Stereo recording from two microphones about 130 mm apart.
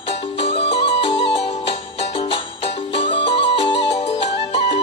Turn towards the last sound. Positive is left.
turn(degrees=55)  # may be behind; listen again after turning